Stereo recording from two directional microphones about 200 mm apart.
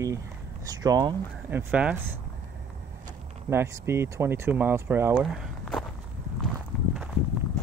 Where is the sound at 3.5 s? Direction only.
15° right (ahead or behind).